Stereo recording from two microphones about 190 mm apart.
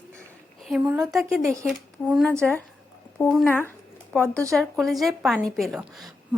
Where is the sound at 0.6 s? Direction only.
5° right (ahead or behind).